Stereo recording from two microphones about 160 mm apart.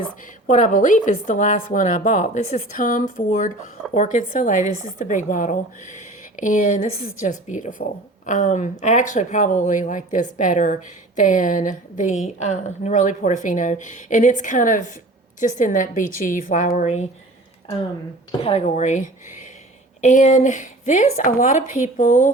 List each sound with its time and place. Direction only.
0.4 s a woman's voice: 55° left (ahead or behind)
18.3 s speech: 35° left (ahead or behind); by 22.3 s 55° left (ahead or behind)